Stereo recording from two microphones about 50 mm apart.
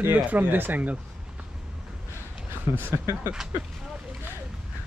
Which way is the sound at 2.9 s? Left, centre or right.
Right.